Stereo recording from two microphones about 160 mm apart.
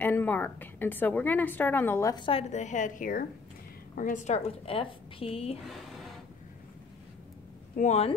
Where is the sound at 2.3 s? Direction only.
40° left (ahead or behind).